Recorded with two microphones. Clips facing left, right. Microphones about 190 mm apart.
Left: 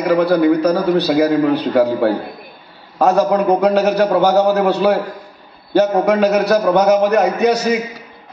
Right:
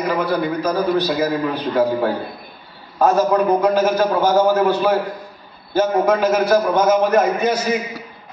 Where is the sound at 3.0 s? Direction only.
70° left (ahead or behind).